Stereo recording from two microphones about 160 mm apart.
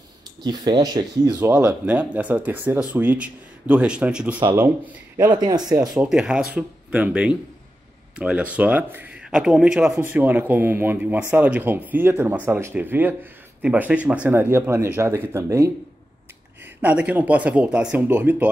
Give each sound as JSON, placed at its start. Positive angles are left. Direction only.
{"t": 0.4, "sound": "speech", "side_deg": -25}
{"t": 1.4, "sound": "speech", "side_deg": -10}
{"t": 5.3, "sound": "speech", "side_deg": -25}
{"t": 5.8, "sound": "speech", "side_deg": -5}
{"t": 16.8, "sound": "speech", "side_deg": -10}